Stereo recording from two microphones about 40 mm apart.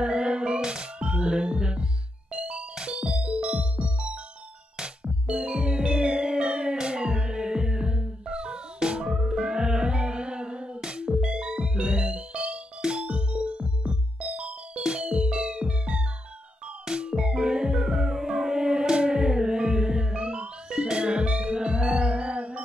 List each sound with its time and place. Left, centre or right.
0.0 s music: right